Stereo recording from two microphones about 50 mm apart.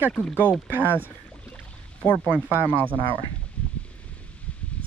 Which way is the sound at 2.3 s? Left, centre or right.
Right.